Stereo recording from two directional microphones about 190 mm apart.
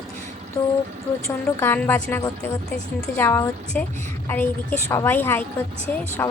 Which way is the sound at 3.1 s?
15° left (ahead or behind).